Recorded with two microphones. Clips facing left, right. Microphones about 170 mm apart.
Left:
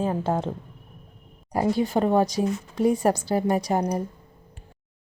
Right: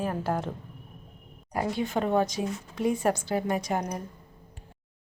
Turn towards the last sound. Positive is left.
turn(degrees=35)  # may be behind; listen again after turning